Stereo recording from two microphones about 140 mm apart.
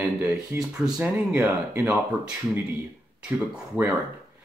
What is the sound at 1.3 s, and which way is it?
Speech, 20° right (ahead or behind).